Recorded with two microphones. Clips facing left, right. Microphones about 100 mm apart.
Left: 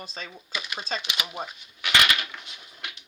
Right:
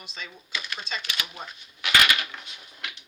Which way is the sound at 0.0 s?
35° left (ahead or behind).